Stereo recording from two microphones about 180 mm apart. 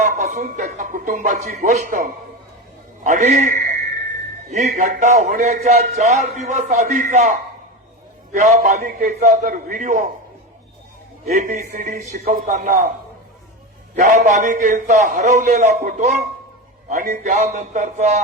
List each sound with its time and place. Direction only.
0.0 s a man's voice: 45° right (ahead or behind)
11.3 s a man's voice: 40° right (ahead or behind)
14.0 s a man's voice: 45° right (ahead or behind)